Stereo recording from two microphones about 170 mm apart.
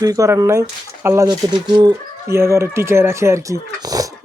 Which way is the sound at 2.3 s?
15° right (ahead or behind).